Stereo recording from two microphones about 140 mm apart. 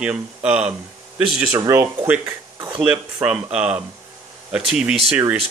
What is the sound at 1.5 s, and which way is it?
A man's voice, 15° right (ahead or behind).